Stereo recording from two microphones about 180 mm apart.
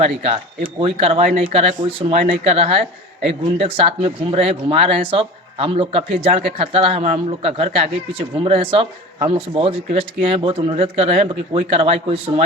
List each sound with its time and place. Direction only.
0.8 s speech: 30° right (ahead or behind)